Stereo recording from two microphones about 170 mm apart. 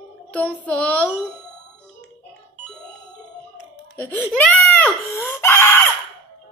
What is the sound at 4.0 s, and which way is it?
Speech, 10° left (ahead or behind).